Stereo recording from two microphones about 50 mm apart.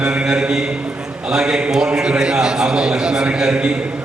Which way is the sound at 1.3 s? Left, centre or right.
Centre.